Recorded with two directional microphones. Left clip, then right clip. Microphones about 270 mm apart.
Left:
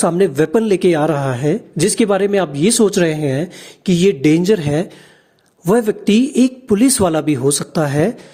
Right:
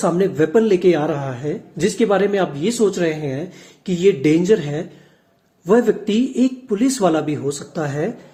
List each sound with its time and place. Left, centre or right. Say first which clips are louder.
0.0 s speech: left 3 dB; left